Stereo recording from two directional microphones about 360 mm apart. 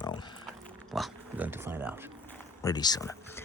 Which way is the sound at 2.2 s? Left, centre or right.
Centre.